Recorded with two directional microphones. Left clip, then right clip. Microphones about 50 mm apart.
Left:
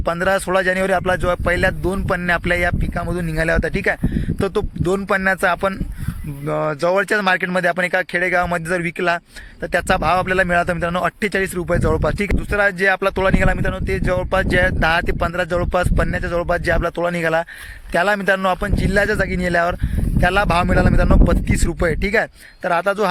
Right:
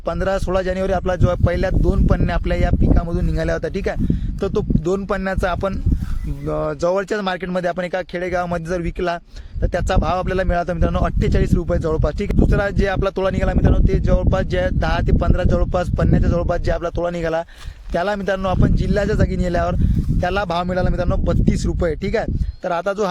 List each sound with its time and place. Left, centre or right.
0.0 s speech: centre
3.1 s speech: right
4.4 s speech: centre
7.3 s speech: centre
8.2 s speech: right
9.7 s speech: centre
11.7 s speech: centre
12.5 s speech: right
16.5 s speech: centre
16.8 s speech: centre
19.1 s speech: right
20.2 s speech: centre